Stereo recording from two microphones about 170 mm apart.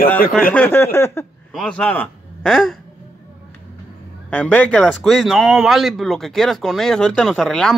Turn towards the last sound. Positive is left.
turn(degrees=5)  # may be behind; listen again after turning